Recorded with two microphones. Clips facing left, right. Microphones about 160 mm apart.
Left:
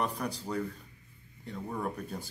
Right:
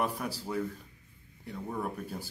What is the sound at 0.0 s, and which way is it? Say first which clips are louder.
Speech: right 1 dB; 5° right (ahead or behind).